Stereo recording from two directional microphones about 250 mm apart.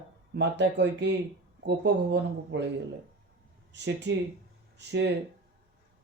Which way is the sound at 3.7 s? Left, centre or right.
Right.